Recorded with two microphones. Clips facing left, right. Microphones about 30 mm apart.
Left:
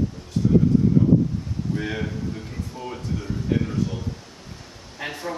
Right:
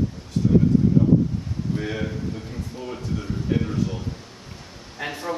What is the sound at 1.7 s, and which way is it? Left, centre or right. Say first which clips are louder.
A man's voice: even; centre.